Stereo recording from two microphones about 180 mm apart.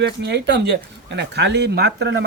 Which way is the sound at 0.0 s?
70° right (ahead or behind).